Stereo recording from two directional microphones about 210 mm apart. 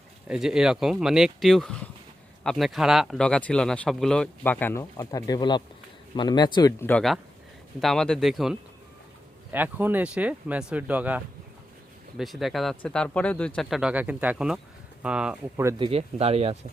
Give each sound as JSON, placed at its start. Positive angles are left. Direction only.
{"t": 0.3, "sound": "speech", "side_deg": -5}
{"t": 15.9, "sound": "speech", "side_deg": -30}